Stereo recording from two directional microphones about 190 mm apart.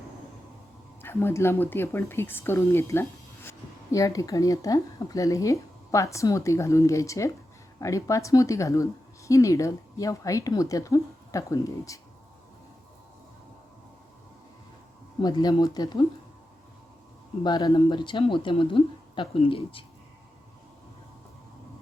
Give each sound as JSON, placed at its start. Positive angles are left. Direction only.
{"t": 1.0, "sound": "speech", "side_deg": 10}
{"t": 15.2, "sound": "a woman's voice", "side_deg": 20}
{"t": 17.4, "sound": "a woman's voice", "side_deg": 20}